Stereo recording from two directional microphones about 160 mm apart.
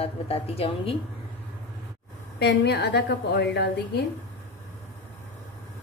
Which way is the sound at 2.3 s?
90° left.